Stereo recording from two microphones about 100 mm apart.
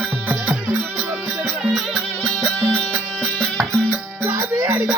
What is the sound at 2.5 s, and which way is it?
Music, 10° left (ahead or behind).